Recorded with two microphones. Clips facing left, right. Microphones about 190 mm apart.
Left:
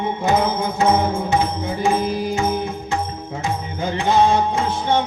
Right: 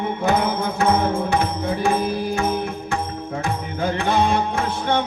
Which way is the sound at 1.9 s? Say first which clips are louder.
Left 3 dB; 25° left (ahead or behind).